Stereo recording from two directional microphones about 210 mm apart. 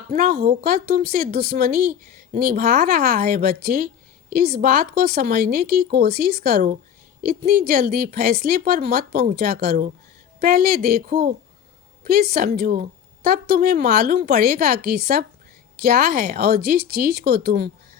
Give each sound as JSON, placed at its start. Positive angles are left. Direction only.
{"t": 0.1, "sound": "a woman's voice", "side_deg": -40}